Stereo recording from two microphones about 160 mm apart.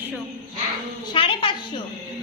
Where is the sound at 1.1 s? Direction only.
30° left (ahead or behind).